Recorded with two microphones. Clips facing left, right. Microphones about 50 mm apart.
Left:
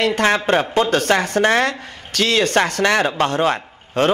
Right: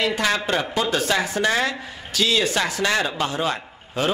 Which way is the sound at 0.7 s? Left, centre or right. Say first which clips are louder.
Left 5 dB; left.